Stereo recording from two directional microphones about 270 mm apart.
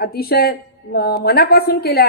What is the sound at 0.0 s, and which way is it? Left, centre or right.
A woman's voice, left.